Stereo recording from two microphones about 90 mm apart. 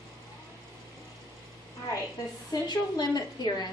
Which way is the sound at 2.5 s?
50° left (ahead or behind).